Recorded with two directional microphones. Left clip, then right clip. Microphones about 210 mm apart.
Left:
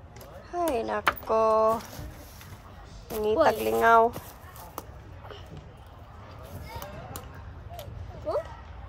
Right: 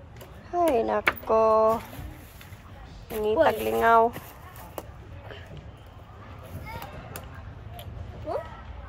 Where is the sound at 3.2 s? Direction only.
25° left (ahead or behind).